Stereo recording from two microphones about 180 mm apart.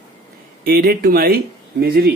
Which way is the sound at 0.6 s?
55° right (ahead or behind).